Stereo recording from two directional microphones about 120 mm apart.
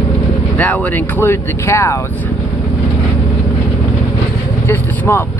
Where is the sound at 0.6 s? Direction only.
15° left (ahead or behind).